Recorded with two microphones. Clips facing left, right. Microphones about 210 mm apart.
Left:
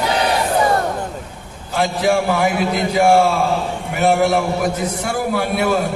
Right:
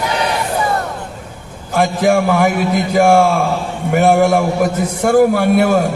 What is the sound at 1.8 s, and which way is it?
A man's voice, 50° right (ahead or behind).